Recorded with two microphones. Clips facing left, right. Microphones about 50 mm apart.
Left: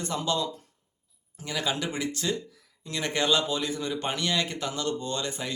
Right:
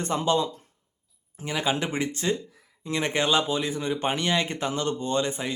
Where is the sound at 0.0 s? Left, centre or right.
Right.